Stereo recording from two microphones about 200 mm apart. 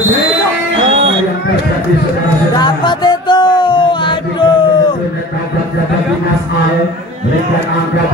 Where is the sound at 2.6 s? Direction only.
20° left (ahead or behind).